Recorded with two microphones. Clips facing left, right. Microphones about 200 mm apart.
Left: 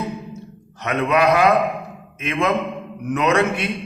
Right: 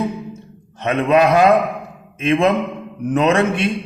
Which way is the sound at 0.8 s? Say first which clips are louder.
Right 4 dB; 30° right (ahead or behind).